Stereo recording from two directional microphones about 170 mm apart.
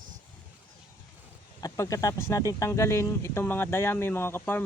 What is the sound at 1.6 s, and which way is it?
Speech, 20° left (ahead or behind).